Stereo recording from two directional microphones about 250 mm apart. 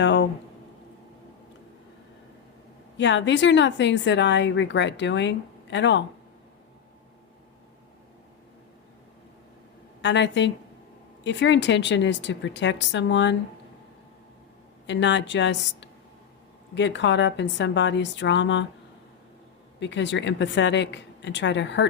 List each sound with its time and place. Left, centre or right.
0.0 s speech: left
3.0 s a woman's voice: left
10.0 s a woman's voice: left
14.8 s a woman's voice: left
19.8 s a woman's voice: left